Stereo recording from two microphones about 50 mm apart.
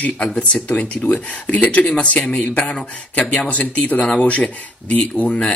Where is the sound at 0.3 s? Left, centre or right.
Left.